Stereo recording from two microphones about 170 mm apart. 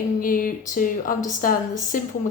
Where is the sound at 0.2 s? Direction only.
55° left (ahead or behind).